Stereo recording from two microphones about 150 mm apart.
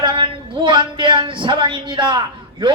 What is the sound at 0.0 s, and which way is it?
A man's voice, 35° right (ahead or behind).